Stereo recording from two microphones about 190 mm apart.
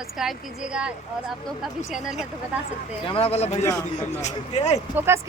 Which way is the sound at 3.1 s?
30° left (ahead or behind).